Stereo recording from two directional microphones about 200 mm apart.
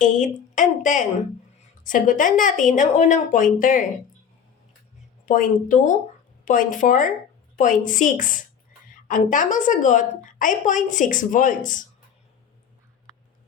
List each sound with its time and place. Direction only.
0.0 s a woman's voice: 40° left (ahead or behind)
5.2 s a woman's voice: 40° left (ahead or behind)